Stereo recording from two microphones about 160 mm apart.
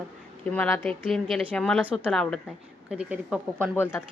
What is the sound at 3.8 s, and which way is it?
Speech, 15° left (ahead or behind).